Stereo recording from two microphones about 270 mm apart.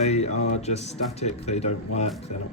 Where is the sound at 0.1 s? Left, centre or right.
Left.